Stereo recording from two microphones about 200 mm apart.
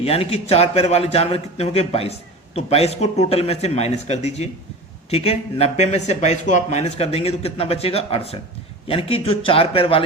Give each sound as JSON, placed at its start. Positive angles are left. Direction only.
{"t": 0.0, "sound": "speech", "side_deg": 30}